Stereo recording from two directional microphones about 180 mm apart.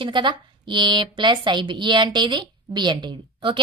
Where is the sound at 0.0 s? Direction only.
25° right (ahead or behind).